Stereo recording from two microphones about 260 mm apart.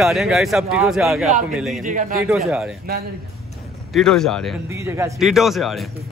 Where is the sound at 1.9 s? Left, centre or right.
Right.